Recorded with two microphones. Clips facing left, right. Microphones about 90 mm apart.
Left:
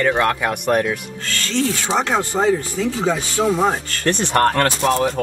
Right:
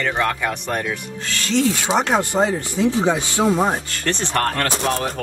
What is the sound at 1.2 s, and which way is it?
Speech, 15° right (ahead or behind).